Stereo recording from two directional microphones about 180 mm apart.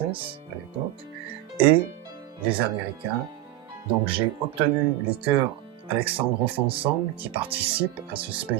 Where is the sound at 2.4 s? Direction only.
30° right (ahead or behind).